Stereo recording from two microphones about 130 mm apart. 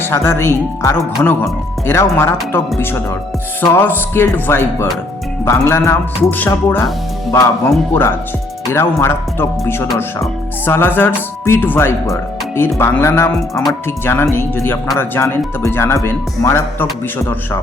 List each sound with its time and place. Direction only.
0.0 s speech: 20° left (ahead or behind)